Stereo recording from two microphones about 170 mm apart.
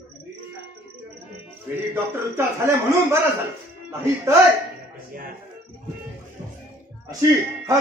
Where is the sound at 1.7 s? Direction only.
15° right (ahead or behind).